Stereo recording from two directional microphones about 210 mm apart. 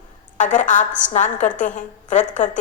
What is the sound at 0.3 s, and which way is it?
A woman's voice, 35° left (ahead or behind).